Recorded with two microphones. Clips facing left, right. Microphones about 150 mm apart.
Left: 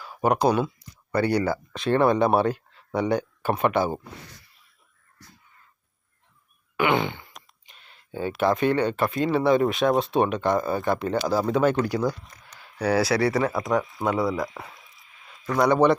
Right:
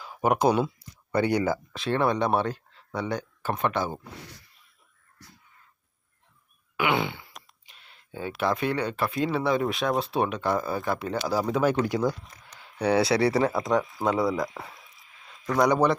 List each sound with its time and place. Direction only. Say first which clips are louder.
0.0 s speech: left 1 dB; 15° right (ahead or behind)
1.7 s speech: left 7 dB; centre (ahead or behind)
6.7 s speech: left 3 dB; 10° right (ahead or behind); by 13.8 s 25° right (ahead or behind)
13.8 s speech: even; centre (ahead or behind)
14.2 s a sound: even; 5° left (ahead or behind)